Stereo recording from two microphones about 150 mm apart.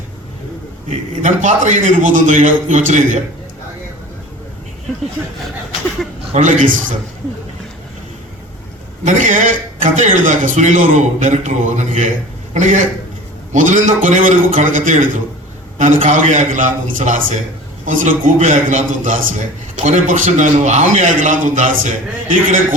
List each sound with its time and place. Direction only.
0.9 s a man's voice: 55° right (ahead or behind)
6.3 s a man's voice: 55° right (ahead or behind)
9.0 s a man's voice: 55° right (ahead or behind)